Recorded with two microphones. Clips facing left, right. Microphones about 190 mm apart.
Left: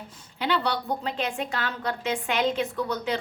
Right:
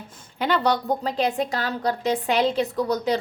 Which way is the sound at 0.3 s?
45° right (ahead or behind).